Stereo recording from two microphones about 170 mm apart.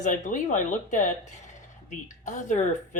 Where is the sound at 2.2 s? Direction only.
45° left (ahead or behind).